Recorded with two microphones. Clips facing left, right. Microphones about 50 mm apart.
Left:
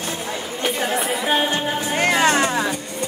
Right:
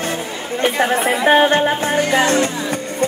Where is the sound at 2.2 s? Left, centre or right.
Left.